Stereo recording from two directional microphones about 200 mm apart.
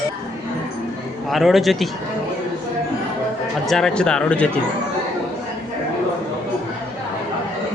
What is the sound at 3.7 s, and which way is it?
Speech, centre (ahead or behind).